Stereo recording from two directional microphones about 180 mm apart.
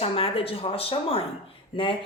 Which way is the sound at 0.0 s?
30° left (ahead or behind).